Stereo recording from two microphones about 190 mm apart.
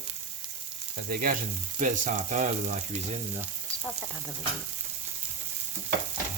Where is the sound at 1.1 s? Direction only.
50° right (ahead or behind).